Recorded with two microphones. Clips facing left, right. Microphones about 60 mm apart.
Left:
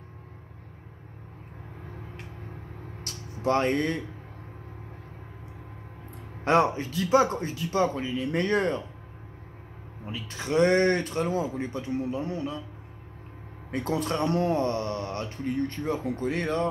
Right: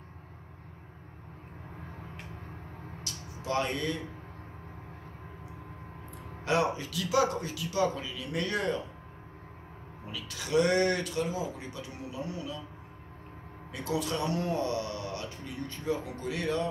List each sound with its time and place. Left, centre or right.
3.0 s music: left
6.4 s speech: left
10.0 s speech: left
13.7 s speech: left